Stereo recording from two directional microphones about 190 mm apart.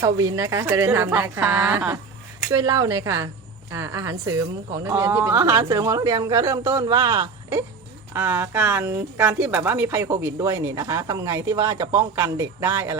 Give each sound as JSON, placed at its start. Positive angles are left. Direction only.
{"t": 0.0, "sound": "speech", "side_deg": -15}